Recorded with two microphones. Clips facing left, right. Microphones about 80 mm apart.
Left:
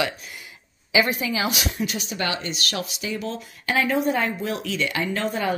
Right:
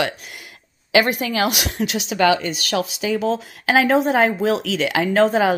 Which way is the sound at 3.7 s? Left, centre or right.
Right.